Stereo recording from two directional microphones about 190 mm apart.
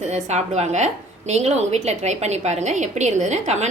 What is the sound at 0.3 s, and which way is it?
A woman's voice, 35° right (ahead or behind).